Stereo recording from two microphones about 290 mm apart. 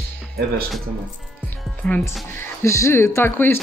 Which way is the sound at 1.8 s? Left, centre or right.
Centre.